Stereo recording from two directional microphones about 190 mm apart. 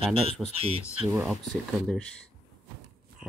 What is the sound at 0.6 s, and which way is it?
Speech, 30° right (ahead or behind).